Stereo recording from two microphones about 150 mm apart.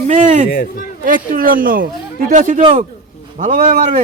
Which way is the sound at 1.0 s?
65° right (ahead or behind).